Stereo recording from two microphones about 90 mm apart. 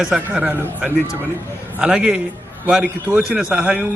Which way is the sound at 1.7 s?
5° right (ahead or behind).